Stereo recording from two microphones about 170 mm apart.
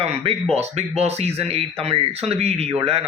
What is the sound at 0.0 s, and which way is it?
Speech, 40° right (ahead or behind).